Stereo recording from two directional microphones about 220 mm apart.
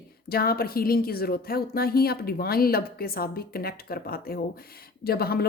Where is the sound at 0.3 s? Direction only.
45° left (ahead or behind).